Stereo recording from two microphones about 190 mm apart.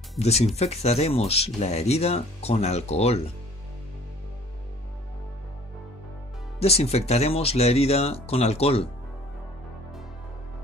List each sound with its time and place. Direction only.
0.2 s speech: 35° left (ahead or behind)
6.6 s speech: 35° left (ahead or behind)